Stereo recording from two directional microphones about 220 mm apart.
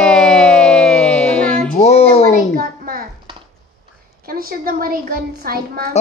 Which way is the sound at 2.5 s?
40° right (ahead or behind).